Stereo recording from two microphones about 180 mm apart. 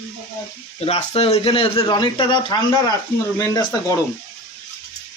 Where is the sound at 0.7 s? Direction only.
35° left (ahead or behind).